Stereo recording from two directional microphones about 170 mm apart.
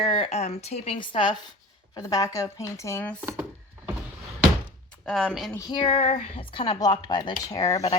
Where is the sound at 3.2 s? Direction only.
15° right (ahead or behind).